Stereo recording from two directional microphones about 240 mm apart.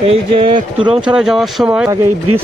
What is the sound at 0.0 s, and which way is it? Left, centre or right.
Speech, right.